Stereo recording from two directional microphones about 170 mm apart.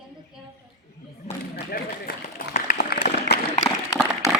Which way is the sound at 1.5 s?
60° left (ahead or behind).